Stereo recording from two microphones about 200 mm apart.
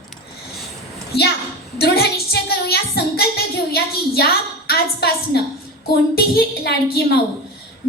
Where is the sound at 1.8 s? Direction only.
55° left (ahead or behind).